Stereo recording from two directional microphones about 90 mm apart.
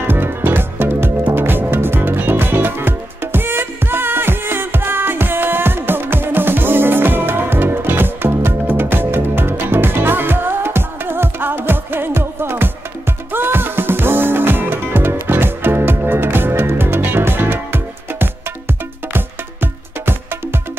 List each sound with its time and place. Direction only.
0.0 s music: 25° right (ahead or behind)